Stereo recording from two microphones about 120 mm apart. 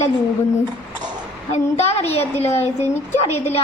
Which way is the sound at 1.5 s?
65° left (ahead or behind).